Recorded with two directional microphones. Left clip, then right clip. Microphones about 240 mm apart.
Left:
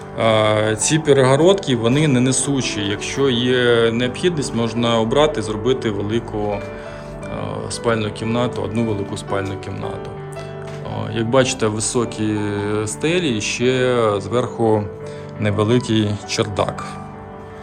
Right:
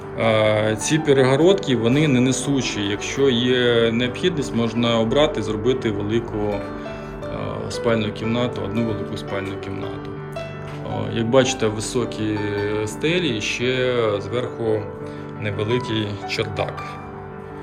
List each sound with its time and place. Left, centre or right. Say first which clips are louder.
0.2 s speech: left 2 dB; centre
10.9 s speech: left 1 dB; centre